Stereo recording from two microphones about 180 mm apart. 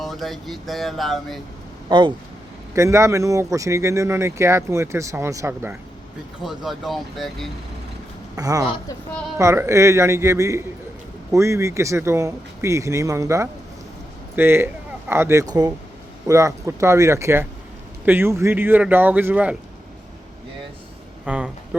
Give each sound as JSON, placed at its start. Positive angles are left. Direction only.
{"t": 0.0, "sound": "speech", "side_deg": 0}
{"t": 1.9, "sound": "a woman's voice", "side_deg": -25}
{"t": 6.4, "sound": "speech", "side_deg": 0}
{"t": 8.4, "sound": "a woman's voice", "side_deg": -20}
{"t": 21.2, "sound": "speech", "side_deg": -5}